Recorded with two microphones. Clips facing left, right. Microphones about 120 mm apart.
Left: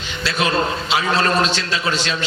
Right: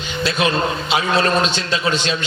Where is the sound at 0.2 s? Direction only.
20° right (ahead or behind).